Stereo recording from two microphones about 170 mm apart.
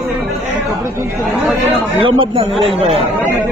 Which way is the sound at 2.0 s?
30° right (ahead or behind).